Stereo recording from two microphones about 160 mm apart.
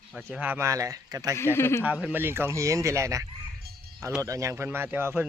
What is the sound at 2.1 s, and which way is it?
Speech, 15° right (ahead or behind).